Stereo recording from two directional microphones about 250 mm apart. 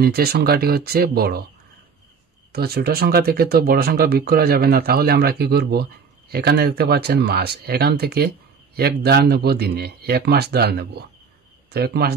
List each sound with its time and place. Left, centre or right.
0.0 s speech: right
2.5 s speech: right